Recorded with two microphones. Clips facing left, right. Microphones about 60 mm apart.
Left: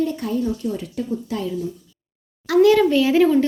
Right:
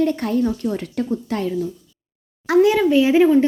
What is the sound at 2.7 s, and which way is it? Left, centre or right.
Speech, centre.